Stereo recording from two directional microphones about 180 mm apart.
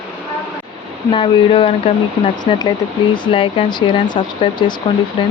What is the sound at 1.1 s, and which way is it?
Speech, 30° left (ahead or behind).